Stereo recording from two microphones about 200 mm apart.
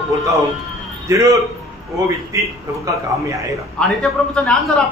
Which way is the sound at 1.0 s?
15° right (ahead or behind).